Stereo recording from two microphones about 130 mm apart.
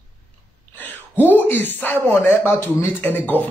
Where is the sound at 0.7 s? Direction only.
15° left (ahead or behind).